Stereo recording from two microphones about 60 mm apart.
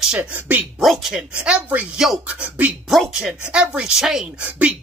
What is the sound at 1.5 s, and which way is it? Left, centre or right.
Speech, centre.